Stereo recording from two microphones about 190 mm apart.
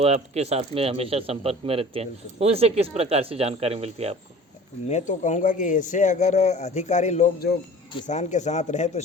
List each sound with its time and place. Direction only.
0.0 s speech: 30° right (ahead or behind)
4.9 s speech: 40° left (ahead or behind)